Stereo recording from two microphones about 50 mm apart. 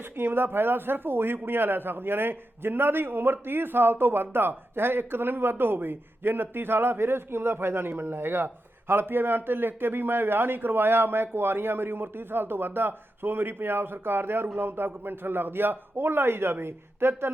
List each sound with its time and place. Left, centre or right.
0.2 s a man's voice: right